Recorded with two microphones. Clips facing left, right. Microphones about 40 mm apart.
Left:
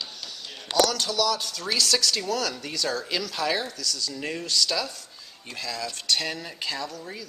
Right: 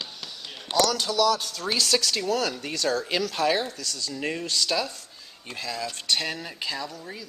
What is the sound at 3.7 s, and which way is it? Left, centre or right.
Speech, right.